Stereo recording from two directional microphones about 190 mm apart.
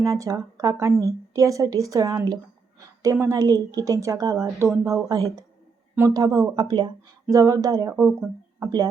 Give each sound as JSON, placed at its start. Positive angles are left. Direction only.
{"t": 0.0, "sound": "a woman's voice", "side_deg": -15}